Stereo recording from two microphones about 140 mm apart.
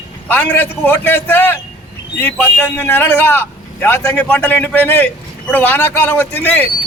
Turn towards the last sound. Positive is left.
turn(degrees=10)  # may be behind; listen again after turning